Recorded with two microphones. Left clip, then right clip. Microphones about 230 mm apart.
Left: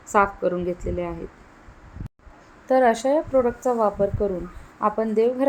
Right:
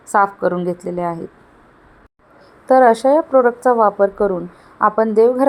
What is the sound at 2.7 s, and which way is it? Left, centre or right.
A woman's voice, right.